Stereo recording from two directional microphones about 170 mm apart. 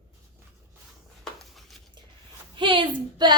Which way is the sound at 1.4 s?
Centre (ahead or behind).